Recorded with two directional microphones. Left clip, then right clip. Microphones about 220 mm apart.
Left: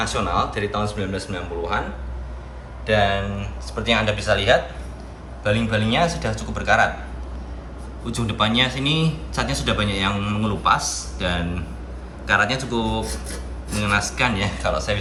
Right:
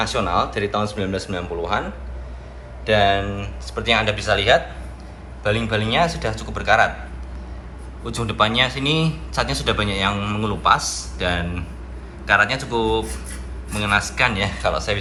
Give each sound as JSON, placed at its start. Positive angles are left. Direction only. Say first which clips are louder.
{"t": 0.0, "sound": "a man's voice", "louder": "right 2 dB", "side_deg": 5}
{"t": 2.8, "sound": "a man's voice", "louder": "right 2 dB", "side_deg": 5}
{"t": 8.0, "sound": "a man's voice", "louder": "right 3 dB", "side_deg": 5}